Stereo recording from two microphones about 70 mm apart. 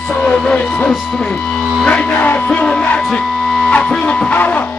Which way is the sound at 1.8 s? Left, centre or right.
Left.